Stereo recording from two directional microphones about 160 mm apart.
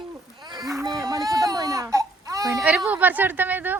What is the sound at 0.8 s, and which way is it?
Speech, 25° right (ahead or behind).